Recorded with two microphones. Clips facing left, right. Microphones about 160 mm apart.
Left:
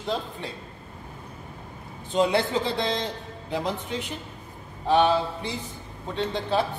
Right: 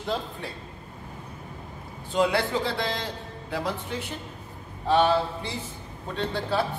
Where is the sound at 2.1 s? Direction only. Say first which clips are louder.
Left 1 dB; 20° left (ahead or behind).